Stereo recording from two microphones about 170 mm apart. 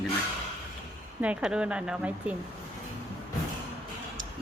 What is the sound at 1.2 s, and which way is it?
Speech, 5° right (ahead or behind).